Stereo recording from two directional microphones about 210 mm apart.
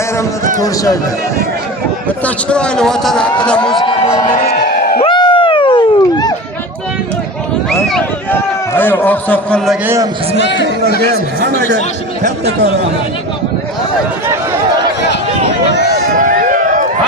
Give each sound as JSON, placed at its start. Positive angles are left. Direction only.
{"t": 2.2, "sound": "a man's voice", "side_deg": 5}
{"t": 4.3, "sound": "crowd", "side_deg": 40}
{"t": 5.0, "sound": "a sound", "side_deg": 20}
{"t": 7.7, "sound": "a man's voice", "side_deg": 0}
{"t": 9.8, "sound": "a man's voice", "side_deg": -15}
{"t": 10.3, "sound": "speech", "side_deg": 60}
{"t": 11.0, "sound": "speech", "side_deg": -55}
{"t": 15.6, "sound": "a sound", "side_deg": 50}
{"t": 16.1, "sound": "a sound", "side_deg": -40}